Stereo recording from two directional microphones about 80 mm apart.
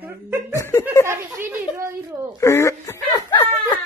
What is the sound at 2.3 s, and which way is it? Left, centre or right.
Speech, left.